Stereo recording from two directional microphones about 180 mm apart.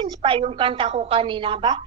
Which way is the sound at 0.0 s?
30° right (ahead or behind).